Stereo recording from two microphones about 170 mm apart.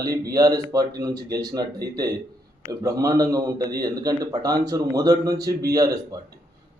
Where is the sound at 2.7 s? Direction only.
20° right (ahead or behind).